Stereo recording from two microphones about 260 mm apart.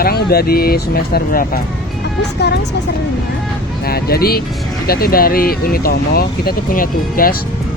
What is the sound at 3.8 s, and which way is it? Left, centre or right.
Speech, left.